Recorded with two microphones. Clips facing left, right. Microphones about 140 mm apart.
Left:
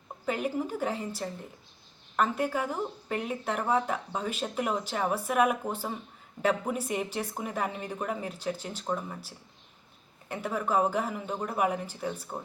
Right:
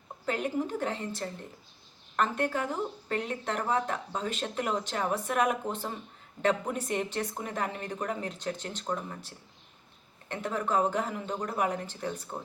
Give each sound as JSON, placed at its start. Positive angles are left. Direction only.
{"t": 0.3, "sound": "speech", "side_deg": 5}